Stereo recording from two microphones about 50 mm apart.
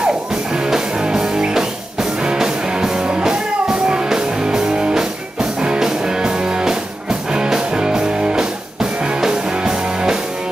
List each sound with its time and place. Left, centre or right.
0.0 s music: centre